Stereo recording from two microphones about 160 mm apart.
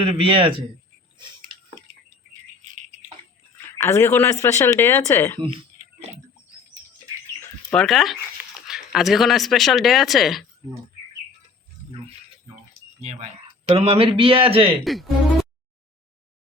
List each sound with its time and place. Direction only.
0.0 s a man's voice: 35° right (ahead or behind)
3.7 s speech: 15° left (ahead or behind)
7.7 s speech: 5° left (ahead or behind)
13.7 s a man's voice: 40° right (ahead or behind)
14.8 s speech: centre (ahead or behind)